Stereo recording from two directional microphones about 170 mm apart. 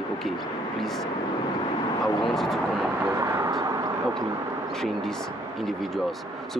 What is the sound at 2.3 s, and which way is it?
Speech, centre (ahead or behind).